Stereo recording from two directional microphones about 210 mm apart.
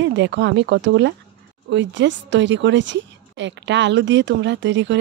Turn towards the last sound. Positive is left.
turn(degrees=-60)  # may be behind; listen again after turning